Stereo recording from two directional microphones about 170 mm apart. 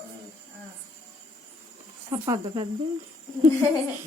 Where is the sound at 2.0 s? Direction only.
25° right (ahead or behind).